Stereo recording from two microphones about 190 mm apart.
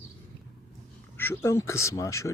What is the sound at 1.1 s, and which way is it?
Speech, 10° left (ahead or behind).